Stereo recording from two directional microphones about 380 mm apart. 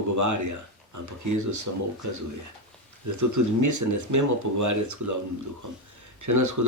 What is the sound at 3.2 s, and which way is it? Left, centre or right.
Speech, right.